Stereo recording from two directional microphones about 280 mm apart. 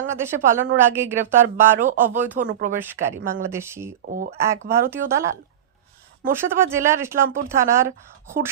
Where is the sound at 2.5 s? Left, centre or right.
Right.